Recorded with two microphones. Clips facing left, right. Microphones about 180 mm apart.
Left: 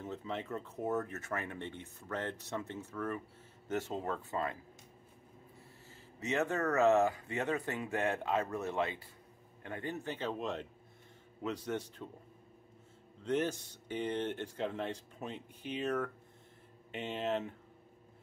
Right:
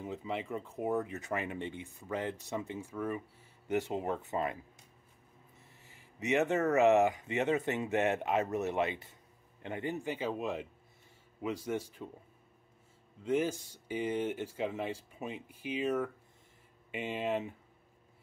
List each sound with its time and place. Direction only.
0.0 s speech: 10° right (ahead or behind)
5.9 s speech: 15° right (ahead or behind)
13.2 s speech: 10° right (ahead or behind)